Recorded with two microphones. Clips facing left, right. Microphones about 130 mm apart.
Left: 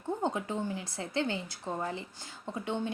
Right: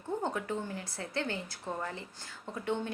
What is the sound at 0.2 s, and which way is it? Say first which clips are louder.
A woman's voice: left 2 dB; 20° left (ahead or behind).